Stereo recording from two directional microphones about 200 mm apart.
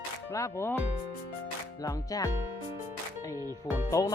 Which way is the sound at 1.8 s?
15° left (ahead or behind).